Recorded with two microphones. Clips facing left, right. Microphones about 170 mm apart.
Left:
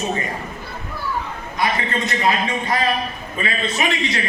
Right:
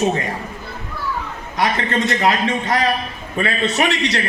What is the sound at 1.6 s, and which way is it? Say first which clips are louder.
Speech: right 3 dB; 85° right.